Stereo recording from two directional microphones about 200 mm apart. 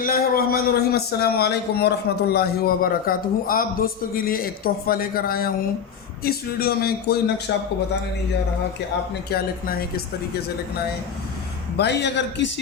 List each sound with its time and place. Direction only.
0.0 s a man's voice: 45° left (ahead or behind)
9.3 s a man's voice: 50° left (ahead or behind)
11.8 s a man's voice: 60° left (ahead or behind)